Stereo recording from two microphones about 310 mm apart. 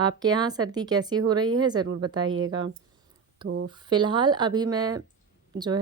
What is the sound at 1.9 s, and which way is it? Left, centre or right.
Speech, right.